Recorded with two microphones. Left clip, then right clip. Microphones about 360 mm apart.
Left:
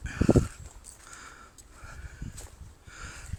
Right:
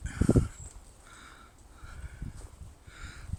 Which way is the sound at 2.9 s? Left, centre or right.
Centre.